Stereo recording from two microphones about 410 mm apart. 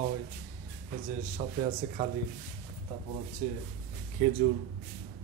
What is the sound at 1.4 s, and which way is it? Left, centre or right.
Speech, centre.